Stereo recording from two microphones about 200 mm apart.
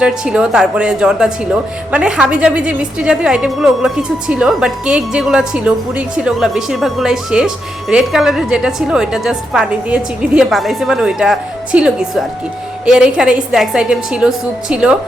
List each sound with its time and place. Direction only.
0.0 s a woman's voice: 5° right (ahead or behind)